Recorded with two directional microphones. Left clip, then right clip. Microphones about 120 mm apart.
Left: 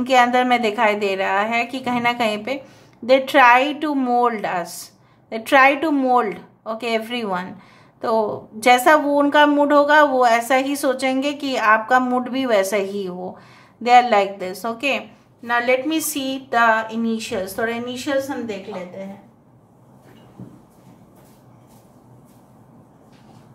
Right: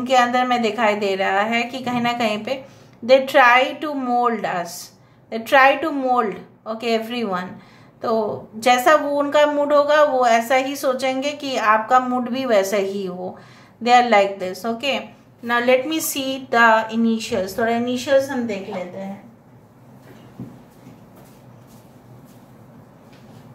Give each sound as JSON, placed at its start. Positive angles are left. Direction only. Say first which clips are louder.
{"t": 0.0, "sound": "a woman's voice", "louder": "left 1 dB", "side_deg": 45}
{"t": 15.4, "sound": "speech", "louder": "right 1 dB", "side_deg": 15}